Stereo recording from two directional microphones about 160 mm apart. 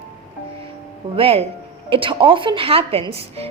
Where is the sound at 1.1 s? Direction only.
35° right (ahead or behind).